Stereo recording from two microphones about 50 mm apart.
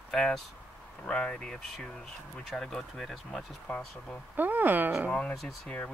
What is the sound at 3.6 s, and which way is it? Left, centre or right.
Speech, left.